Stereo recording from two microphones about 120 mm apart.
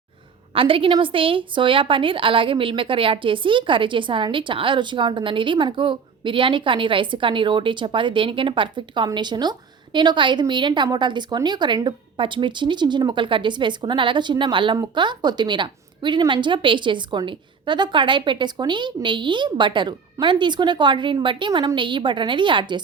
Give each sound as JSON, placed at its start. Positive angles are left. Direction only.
{"t": 0.5, "sound": "a woman's voice", "side_deg": -50}